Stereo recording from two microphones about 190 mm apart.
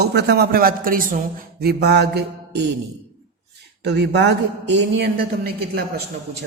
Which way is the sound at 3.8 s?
65° right (ahead or behind).